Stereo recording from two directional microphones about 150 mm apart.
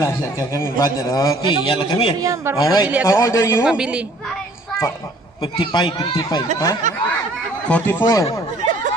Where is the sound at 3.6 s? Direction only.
5° right (ahead or behind).